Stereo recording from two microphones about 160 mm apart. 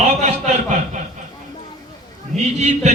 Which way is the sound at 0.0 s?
45° right (ahead or behind).